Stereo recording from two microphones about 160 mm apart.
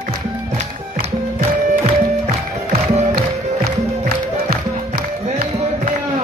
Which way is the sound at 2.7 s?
40° right (ahead or behind).